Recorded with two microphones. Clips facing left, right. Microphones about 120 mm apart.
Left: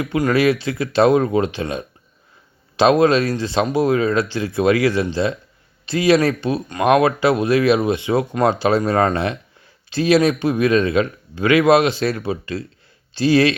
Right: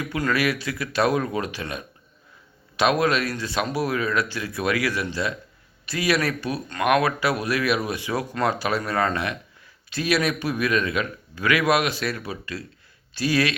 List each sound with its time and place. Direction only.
0.2 s speech: 25° left (ahead or behind)